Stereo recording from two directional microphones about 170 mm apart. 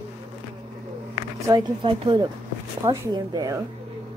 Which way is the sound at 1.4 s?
25° right (ahead or behind).